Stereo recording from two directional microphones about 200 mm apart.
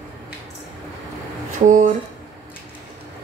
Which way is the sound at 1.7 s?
40° right (ahead or behind).